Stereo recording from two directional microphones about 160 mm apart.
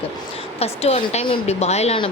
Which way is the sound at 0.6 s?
40° left (ahead or behind).